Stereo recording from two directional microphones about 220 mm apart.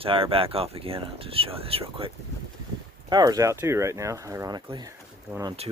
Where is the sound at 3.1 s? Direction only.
20° right (ahead or behind).